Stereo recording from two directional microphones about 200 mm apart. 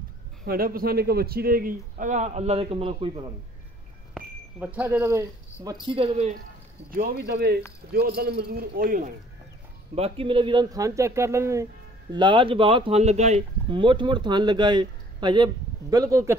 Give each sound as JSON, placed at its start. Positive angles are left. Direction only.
{"t": 0.5, "sound": "a man's voice", "side_deg": -45}
{"t": 4.1, "sound": "speech", "side_deg": -5}
{"t": 6.9, "sound": "a man's voice", "side_deg": -50}
{"t": 9.9, "sound": "speech", "side_deg": -30}